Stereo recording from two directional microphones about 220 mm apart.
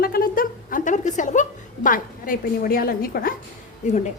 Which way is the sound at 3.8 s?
30° left (ahead or behind).